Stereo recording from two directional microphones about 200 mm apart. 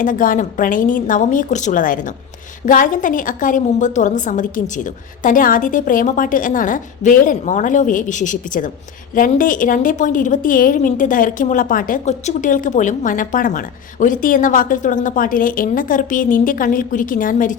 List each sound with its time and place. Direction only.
0.0 s a woman's voice: 40° left (ahead or behind)